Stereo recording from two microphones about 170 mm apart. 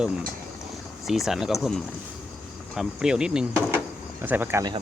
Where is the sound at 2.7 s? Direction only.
5° right (ahead or behind).